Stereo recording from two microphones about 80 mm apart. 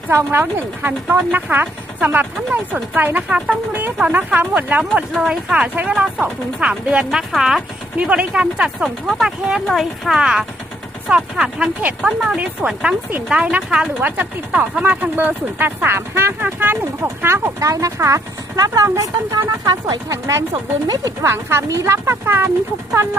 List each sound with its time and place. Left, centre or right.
0.3 s speech: right
3.2 s speech: centre
3.7 s speech: right
5.1 s speech: centre
7.9 s speech: centre
12.2 s speech: centre; by 21.1 s right
21.2 s speech: right